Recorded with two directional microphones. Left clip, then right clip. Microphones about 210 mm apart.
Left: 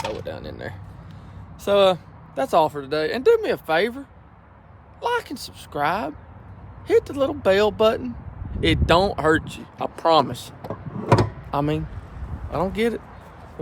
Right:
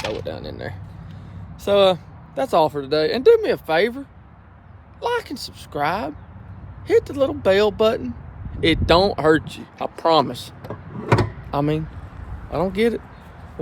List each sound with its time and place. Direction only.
0.0 s speech: 10° left (ahead or behind)
10.7 s music: 25° left (ahead or behind)
12.5 s speech: 10° left (ahead or behind)